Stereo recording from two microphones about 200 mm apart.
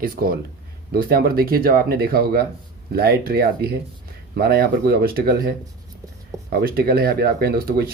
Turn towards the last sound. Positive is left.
turn(degrees=-50)  # may be behind; listen again after turning